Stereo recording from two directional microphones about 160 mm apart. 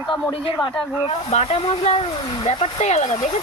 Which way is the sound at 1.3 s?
40° left (ahead or behind).